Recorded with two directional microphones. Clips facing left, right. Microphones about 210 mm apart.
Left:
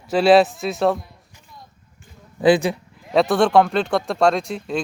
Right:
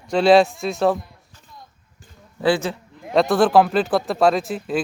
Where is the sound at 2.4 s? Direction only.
15° left (ahead or behind).